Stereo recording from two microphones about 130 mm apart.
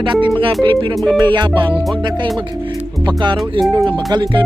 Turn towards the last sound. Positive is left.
turn(degrees=-35)  # may be behind; listen again after turning